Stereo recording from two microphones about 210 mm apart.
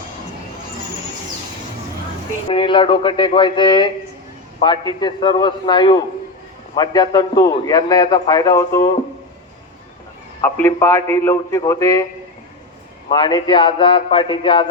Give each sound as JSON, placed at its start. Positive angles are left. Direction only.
{"t": 2.5, "sound": "a man's voice", "side_deg": 25}
{"t": 10.4, "sound": "a man's voice", "side_deg": 10}
{"t": 13.1, "sound": "a man's voice", "side_deg": 20}